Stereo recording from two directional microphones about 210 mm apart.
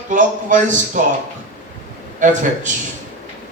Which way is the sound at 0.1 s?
40° right (ahead or behind).